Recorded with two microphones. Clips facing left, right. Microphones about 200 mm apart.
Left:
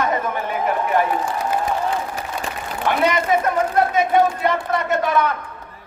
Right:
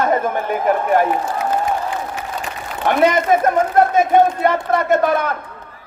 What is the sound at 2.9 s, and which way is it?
A man's voice, 50° right (ahead or behind).